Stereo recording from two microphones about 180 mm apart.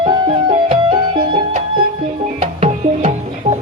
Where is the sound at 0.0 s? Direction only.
25° right (ahead or behind).